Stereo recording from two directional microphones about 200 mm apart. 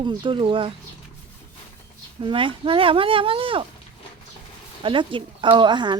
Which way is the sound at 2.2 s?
25° right (ahead or behind).